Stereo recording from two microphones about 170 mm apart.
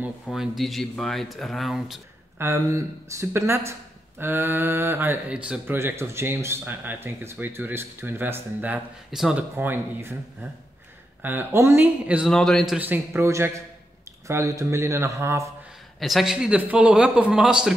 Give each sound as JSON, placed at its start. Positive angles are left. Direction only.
{"t": 0.0, "sound": "speech", "side_deg": 0}
{"t": 2.3, "sound": "speech", "side_deg": -15}
{"t": 11.2, "sound": "speech", "side_deg": -15}
{"t": 12.3, "sound": "speech", "side_deg": 5}
{"t": 16.0, "sound": "speech", "side_deg": 0}